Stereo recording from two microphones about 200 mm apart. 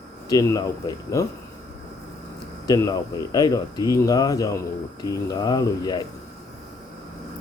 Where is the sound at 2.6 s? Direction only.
20° left (ahead or behind).